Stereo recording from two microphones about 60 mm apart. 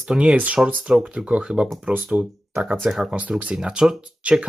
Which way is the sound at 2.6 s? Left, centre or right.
Right.